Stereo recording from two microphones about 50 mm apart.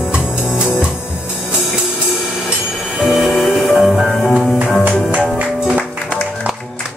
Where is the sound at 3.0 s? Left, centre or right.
Centre.